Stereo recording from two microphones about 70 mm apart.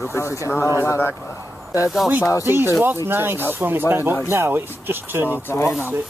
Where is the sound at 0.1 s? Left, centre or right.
Left.